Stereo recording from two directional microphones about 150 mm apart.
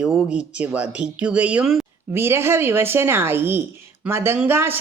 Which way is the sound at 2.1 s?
15° right (ahead or behind).